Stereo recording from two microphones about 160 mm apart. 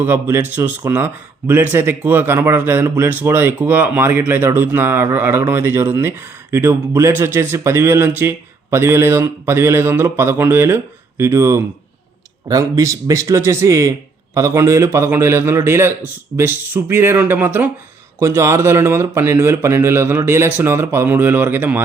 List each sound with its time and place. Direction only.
0.0 s a man's voice: 15° right (ahead or behind)